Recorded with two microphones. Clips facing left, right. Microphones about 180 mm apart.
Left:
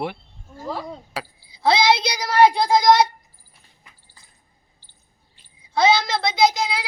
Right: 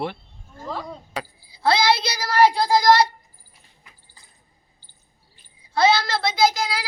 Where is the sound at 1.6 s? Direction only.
20° left (ahead or behind).